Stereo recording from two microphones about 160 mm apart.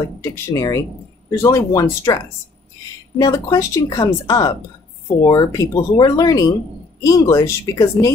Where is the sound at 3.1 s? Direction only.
20° left (ahead or behind).